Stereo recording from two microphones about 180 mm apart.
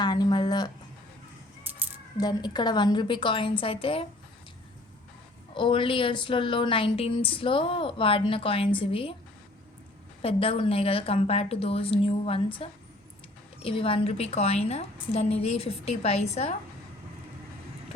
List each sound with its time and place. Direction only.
0.0 s a sound: 25° left (ahead or behind)
2.1 s a woman's voice: 20° left (ahead or behind)
5.5 s a woman's voice: 30° left (ahead or behind)
10.2 s a woman's voice: 30° left (ahead or behind)